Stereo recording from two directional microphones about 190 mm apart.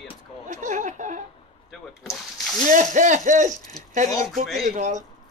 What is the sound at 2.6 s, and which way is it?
Speech, 40° right (ahead or behind).